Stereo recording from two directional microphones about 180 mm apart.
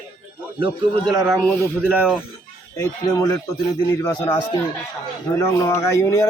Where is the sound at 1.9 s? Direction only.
5° right (ahead or behind).